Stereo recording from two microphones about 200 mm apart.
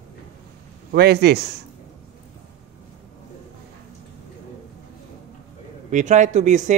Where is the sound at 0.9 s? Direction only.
50° right (ahead or behind).